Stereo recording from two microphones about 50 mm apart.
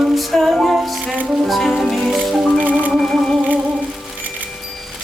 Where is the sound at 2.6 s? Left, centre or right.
Right.